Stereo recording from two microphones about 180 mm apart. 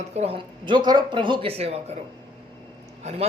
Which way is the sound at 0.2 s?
30° right (ahead or behind).